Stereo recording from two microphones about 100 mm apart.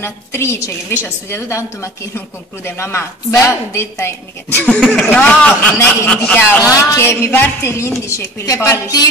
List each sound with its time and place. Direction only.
0.0 s speech: 25° left (ahead or behind)
4.6 s speech: 10° left (ahead or behind)
6.6 s a woman's voice: 35° left (ahead or behind)
7.0 s speech: 25° left (ahead or behind)